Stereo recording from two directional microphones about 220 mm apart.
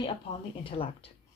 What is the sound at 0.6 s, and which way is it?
Speech, 25° left (ahead or behind).